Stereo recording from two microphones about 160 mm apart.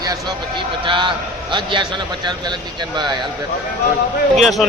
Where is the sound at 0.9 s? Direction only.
30° right (ahead or behind).